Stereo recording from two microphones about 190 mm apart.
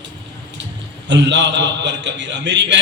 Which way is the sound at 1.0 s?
70° right (ahead or behind).